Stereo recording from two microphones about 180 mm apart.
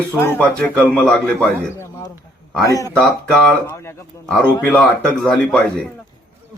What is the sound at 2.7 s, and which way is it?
A man's voice, 20° left (ahead or behind).